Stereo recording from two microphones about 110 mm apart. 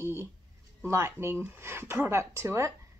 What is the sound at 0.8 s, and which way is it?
Speech, 25° right (ahead or behind).